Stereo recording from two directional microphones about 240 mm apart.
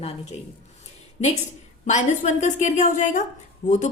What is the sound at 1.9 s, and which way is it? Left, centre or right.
A woman's voice, left.